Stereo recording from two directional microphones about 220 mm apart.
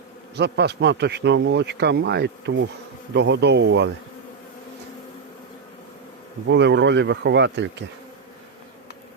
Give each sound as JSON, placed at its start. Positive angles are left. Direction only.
{"t": 0.3, "sound": "speech", "side_deg": -50}
{"t": 6.5, "sound": "speech", "side_deg": -55}